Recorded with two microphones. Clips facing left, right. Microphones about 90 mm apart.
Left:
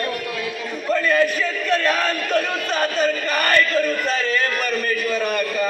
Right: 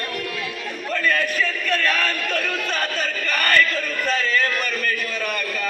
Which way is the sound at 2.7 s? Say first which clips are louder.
Left 5 dB; 10° left (ahead or behind).